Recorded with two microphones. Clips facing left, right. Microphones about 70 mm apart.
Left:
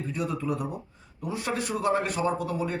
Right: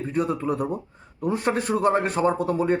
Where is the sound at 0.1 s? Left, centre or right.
Right.